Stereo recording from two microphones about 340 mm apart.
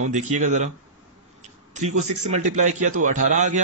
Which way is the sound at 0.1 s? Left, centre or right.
Right.